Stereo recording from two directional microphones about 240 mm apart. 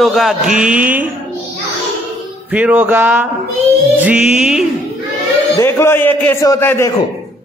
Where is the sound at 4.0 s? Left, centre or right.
Centre.